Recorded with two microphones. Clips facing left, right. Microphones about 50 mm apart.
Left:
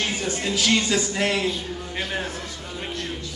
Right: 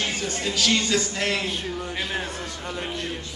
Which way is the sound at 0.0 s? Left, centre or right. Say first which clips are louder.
Left 1 dB; centre.